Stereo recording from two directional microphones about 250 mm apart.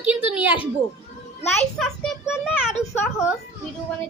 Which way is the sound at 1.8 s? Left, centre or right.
Centre.